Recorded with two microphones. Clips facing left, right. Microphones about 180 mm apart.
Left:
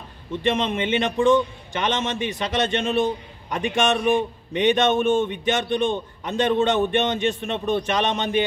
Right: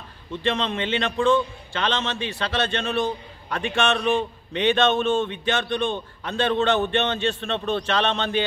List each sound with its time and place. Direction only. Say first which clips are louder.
0.4 s a man's voice: left 2 dB; 20° left (ahead or behind)